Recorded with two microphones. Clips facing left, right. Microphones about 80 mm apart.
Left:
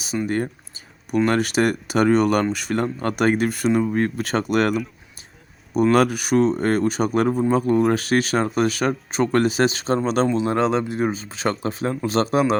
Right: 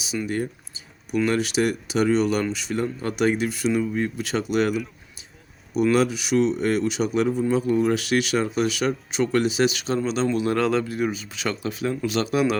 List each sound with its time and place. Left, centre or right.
0.3 s speech: left
5.7 s speech: left
10.2 s speech: left
11.0 s speech: left